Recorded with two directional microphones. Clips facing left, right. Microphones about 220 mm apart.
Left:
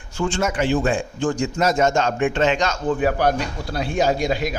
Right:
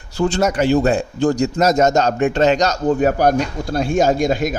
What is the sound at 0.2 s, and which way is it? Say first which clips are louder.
A man's voice: right 5 dB; 40° right (ahead or behind).